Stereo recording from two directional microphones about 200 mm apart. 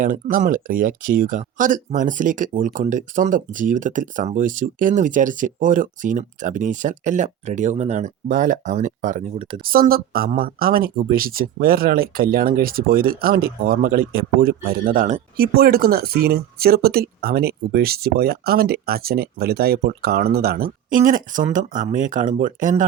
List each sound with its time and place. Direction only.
0.0 s speech: 45° right (ahead or behind)
9.6 s speech: 45° right (ahead or behind)